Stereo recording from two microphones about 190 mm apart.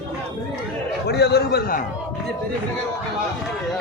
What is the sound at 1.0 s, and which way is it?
Speech, 60° left (ahead or behind).